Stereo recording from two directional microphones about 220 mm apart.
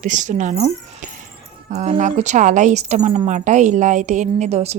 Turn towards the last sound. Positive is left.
turn(degrees=-30)  # may be behind; listen again after turning